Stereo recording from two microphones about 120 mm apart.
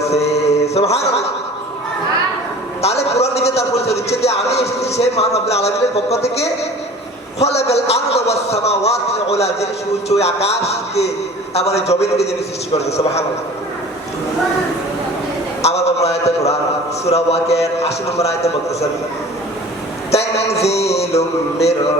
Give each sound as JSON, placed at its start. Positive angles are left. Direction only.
{"t": 0.0, "sound": "mantra", "side_deg": 60}
{"t": 2.8, "sound": "a man's voice", "side_deg": 60}
{"t": 15.6, "sound": "a sound", "side_deg": 60}
{"t": 17.1, "sound": "a man's voice", "side_deg": 60}
{"t": 20.1, "sound": "a man's voice", "side_deg": 60}